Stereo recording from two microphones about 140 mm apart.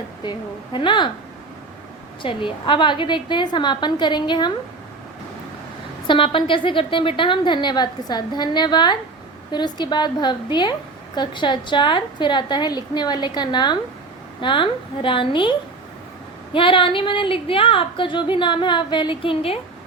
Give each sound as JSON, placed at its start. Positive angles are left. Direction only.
{"t": 0.3, "sound": "a woman's voice", "side_deg": 35}
{"t": 2.2, "sound": "a woman's voice", "side_deg": 35}
{"t": 6.1, "sound": "a woman's voice", "side_deg": 35}